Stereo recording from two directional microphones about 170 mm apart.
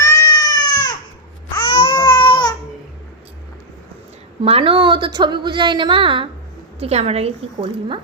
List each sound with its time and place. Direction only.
0.0 s cat: 15° left (ahead or behind)
1.6 s baby cry: 25° left (ahead or behind)
4.4 s a woman's voice: 35° right (ahead or behind)